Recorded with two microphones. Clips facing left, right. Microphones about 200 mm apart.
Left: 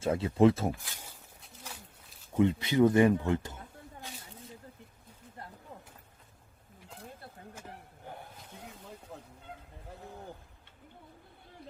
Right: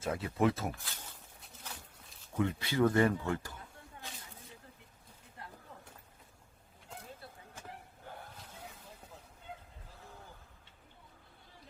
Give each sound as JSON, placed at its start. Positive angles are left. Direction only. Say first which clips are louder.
{"t": 0.0, "sound": "speech", "louder": "left 7 dB", "side_deg": 25}
{"t": 2.3, "sound": "speech", "louder": "left 7 dB", "side_deg": 20}
{"t": 5.4, "sound": "a sound", "louder": "left 3 dB", "side_deg": 40}
{"t": 9.1, "sound": "fowl", "louder": "left 8 dB", "side_deg": 65}